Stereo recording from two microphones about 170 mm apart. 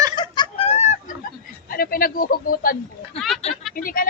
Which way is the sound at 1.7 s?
60° left (ahead or behind).